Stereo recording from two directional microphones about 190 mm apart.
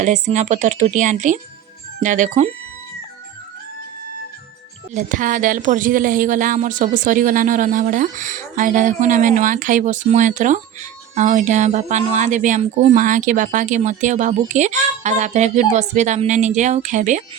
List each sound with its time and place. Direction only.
0.0 s a woman's voice: 40° right (ahead or behind)
4.9 s a woman's voice: 45° right (ahead or behind)